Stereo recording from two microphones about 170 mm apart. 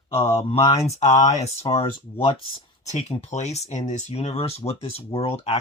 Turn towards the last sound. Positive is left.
turn(degrees=35)  # may be behind; listen again after turning